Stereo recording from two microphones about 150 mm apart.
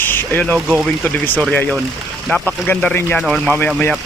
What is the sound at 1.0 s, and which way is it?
Speech, 10° left (ahead or behind).